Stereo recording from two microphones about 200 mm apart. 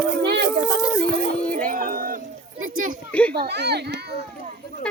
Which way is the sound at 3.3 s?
55° right (ahead or behind).